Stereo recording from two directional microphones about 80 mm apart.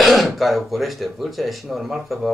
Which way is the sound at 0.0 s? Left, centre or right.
Centre.